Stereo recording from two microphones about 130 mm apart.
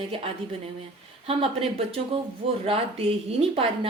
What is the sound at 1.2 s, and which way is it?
Speech, 50° right (ahead or behind).